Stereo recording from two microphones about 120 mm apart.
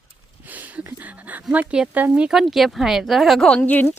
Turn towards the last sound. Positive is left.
turn(degrees=15)  # may be behind; listen again after turning